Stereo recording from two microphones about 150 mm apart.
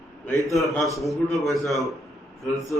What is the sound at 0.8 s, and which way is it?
A man's voice, centre (ahead or behind).